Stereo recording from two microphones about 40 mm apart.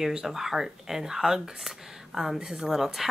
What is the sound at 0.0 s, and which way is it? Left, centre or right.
A woman's voice, centre.